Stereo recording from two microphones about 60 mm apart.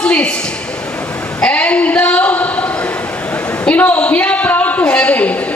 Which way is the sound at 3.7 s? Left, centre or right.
Left.